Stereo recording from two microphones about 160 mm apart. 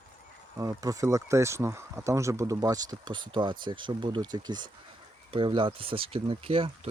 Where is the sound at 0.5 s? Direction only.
20° right (ahead or behind).